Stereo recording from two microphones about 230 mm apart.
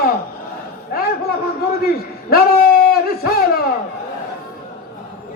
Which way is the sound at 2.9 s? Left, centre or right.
Left.